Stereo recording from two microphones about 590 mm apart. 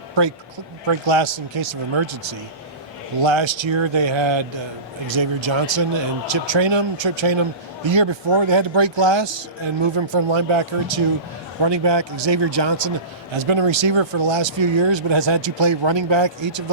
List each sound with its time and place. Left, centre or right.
0.9 s speech: right